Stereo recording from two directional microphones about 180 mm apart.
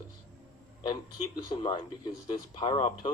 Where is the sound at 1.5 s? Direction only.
25° left (ahead or behind).